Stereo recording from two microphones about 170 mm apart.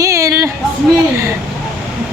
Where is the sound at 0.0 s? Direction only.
20° right (ahead or behind).